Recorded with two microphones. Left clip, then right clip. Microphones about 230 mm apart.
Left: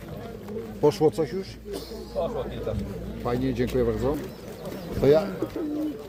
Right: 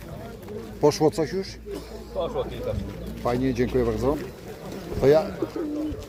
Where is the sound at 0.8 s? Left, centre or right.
Centre.